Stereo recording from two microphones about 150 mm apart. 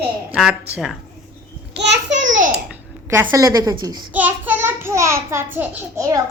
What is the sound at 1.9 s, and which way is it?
Speech, 55° right (ahead or behind).